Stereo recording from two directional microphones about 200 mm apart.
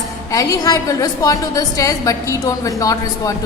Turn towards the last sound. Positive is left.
turn(degrees=15)  # may be behind; listen again after turning